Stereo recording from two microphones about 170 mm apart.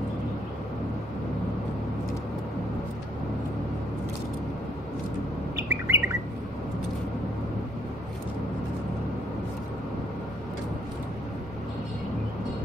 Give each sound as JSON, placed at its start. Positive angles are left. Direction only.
{"t": 5.6, "sound": "bird", "side_deg": -15}